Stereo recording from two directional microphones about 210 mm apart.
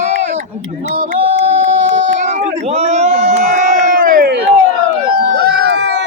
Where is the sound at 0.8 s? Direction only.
30° right (ahead or behind); by 6.0 s 55° right (ahead or behind).